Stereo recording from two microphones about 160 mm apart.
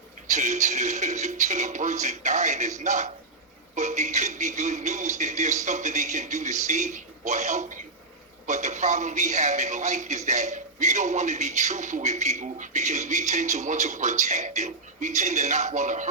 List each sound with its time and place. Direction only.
0.3 s a man's voice: 45° right (ahead or behind)